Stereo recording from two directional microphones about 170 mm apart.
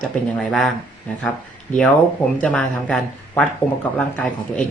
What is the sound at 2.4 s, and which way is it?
Speech, 5° left (ahead or behind).